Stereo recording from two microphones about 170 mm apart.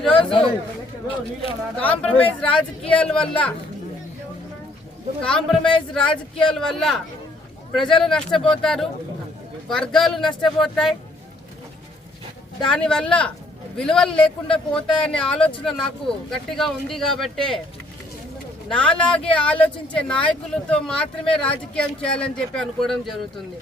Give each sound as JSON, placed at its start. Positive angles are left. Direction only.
{"t": 0.2, "sound": "a man's voice", "side_deg": 30}
{"t": 1.8, "sound": "speech", "side_deg": 10}
{"t": 5.2, "sound": "speech", "side_deg": 5}
{"t": 8.3, "sound": "speech", "side_deg": 5}
{"t": 12.6, "sound": "speech", "side_deg": 5}
{"t": 18.7, "sound": "speech", "side_deg": 5}